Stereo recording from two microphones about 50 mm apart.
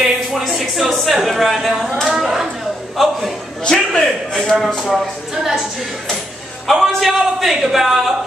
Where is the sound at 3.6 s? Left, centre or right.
Centre.